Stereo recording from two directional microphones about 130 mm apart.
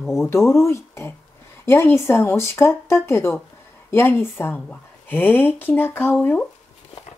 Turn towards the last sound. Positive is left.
turn(degrees=15)  # may be behind; listen again after turning